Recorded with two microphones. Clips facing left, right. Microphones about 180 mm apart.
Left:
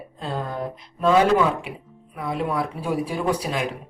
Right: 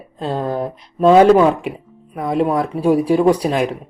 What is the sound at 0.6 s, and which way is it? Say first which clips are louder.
Mantra: right 8 dB; 35° right (ahead or behind).